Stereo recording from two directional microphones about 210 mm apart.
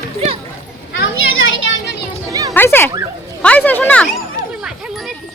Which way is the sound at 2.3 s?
15° right (ahead or behind).